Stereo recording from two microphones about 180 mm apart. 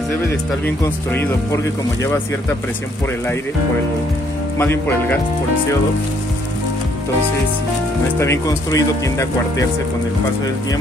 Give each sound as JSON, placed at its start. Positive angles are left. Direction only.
{"t": 0.8, "sound": "speech", "side_deg": 10}
{"t": 4.6, "sound": "speech", "side_deg": 10}
{"t": 8.2, "sound": "speech", "side_deg": 15}